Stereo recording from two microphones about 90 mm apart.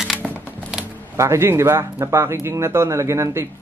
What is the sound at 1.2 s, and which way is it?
Speech, 30° right (ahead or behind).